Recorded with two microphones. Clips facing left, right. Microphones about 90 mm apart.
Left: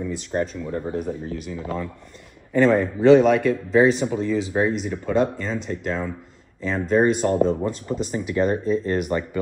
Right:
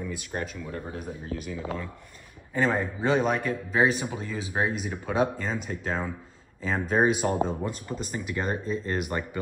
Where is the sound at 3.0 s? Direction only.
90° left.